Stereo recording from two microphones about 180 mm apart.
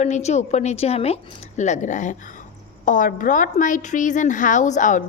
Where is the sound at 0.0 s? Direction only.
40° left (ahead or behind).